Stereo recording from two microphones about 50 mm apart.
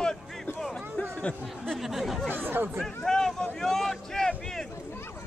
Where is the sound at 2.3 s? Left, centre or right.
Right.